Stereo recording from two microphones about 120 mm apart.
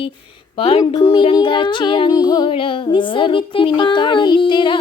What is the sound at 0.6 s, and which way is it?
Speech, 55° left (ahead or behind).